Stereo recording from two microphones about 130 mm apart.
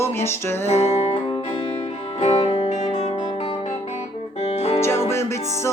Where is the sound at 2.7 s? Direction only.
60° left (ahead or behind).